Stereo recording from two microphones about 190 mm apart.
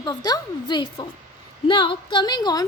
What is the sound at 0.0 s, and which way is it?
A woman's voice, 20° left (ahead or behind).